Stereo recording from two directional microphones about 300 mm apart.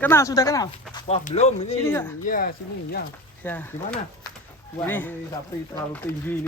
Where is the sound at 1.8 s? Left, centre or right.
Centre.